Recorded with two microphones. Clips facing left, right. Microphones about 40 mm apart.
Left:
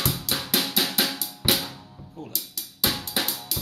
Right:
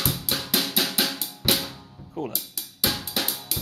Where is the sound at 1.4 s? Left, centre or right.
Centre.